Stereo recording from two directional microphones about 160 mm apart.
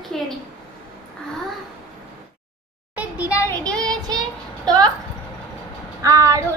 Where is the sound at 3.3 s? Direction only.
10° left (ahead or behind).